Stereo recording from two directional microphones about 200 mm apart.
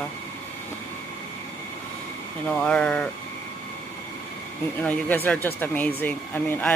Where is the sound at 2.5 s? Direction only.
5° left (ahead or behind).